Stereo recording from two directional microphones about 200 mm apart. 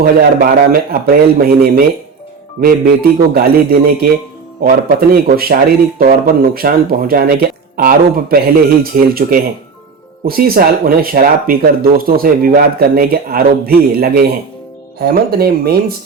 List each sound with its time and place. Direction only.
0.0 s speech: 50° right (ahead or behind)